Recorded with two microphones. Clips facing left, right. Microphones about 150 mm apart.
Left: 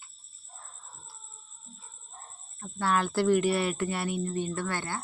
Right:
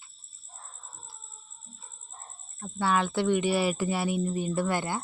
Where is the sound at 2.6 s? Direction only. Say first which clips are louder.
Right 1 dB; centre (ahead or behind).